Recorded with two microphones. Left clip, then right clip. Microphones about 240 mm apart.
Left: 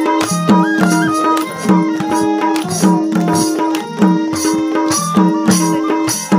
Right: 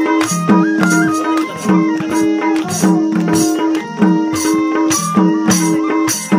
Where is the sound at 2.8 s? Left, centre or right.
Left.